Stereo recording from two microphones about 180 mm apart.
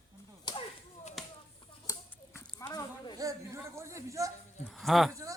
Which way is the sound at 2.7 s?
25° left (ahead or behind).